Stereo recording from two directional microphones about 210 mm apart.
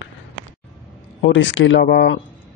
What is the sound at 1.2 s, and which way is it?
Speech, 60° left (ahead or behind).